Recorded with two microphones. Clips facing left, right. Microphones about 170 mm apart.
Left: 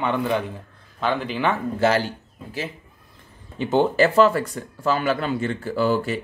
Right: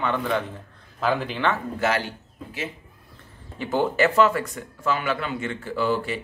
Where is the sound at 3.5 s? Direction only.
25° left (ahead or behind); by 6.2 s 40° left (ahead or behind).